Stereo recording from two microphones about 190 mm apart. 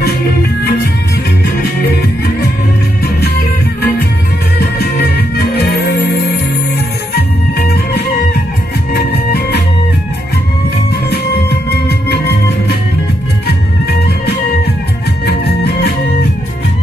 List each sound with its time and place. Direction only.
3.2 s music: 60° left (ahead or behind)
7.2 s music: 55° left (ahead or behind)
11.7 s music: 60° left (ahead or behind)
15.2 s music: 60° left (ahead or behind)